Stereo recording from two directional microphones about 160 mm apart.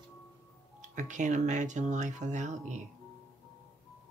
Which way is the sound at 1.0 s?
50° right (ahead or behind).